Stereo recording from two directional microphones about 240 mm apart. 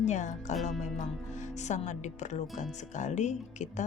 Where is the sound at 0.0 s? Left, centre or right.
Left.